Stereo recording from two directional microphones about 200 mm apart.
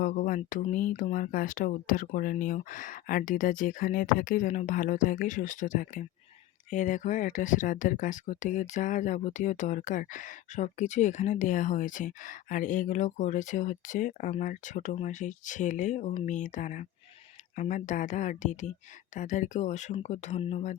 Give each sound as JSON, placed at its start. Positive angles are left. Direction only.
{"t": 0.0, "sound": "speech", "side_deg": 40}